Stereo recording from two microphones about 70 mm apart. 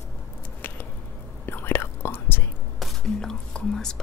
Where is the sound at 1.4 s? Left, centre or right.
Left.